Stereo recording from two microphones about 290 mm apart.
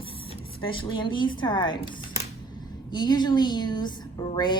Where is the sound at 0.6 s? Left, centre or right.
Centre.